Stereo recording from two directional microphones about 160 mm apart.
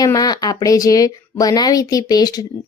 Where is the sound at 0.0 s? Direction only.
25° left (ahead or behind).